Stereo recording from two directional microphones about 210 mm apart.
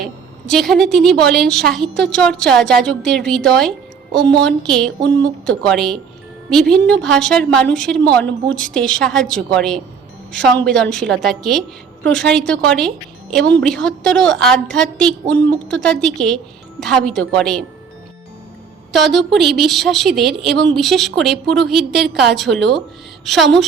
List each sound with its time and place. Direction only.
0.4 s a woman's voice: centre (ahead or behind)
18.9 s a woman's voice: centre (ahead or behind)